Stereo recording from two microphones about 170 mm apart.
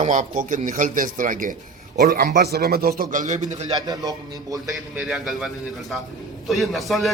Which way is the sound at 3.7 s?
20° right (ahead or behind).